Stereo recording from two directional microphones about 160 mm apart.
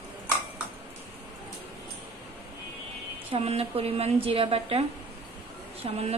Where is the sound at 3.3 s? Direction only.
40° right (ahead or behind).